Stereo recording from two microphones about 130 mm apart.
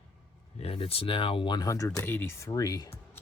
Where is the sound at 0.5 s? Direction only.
50° left (ahead or behind).